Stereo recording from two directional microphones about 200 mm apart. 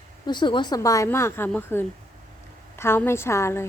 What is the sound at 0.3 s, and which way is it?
Speech, 25° left (ahead or behind).